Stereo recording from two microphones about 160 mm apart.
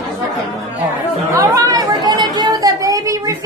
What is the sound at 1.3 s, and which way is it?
Chatter, 20° right (ahead or behind).